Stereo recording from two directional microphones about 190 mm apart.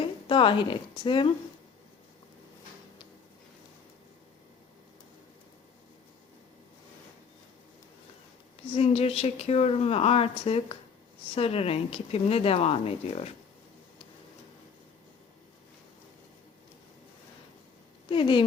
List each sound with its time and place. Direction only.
0.0 s a woman's voice: 25° left (ahead or behind)
8.7 s a woman's voice: 30° left (ahead or behind)
18.1 s speech: 25° left (ahead or behind)